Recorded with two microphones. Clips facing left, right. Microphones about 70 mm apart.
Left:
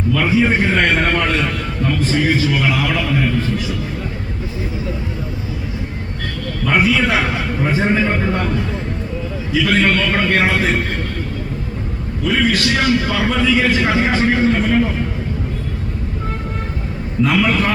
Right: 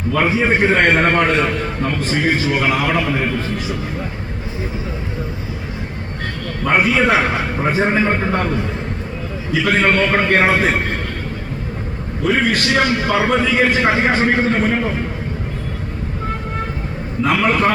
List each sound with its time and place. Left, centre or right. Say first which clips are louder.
0.1 s a man's voice: even; right
6.7 s a man's voice: right 1 dB; right
9.6 s a man's voice: right 2 dB; right
12.2 s a man's voice: even; right
17.2 s a man's voice: right 1 dB; right